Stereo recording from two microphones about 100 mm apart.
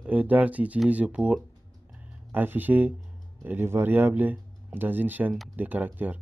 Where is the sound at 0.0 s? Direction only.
15° right (ahead or behind).